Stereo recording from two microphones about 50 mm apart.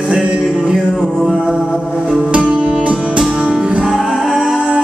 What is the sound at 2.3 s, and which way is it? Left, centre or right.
Music, right.